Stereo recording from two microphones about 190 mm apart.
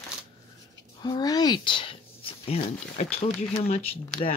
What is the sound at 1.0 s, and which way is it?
Speech, 20° left (ahead or behind).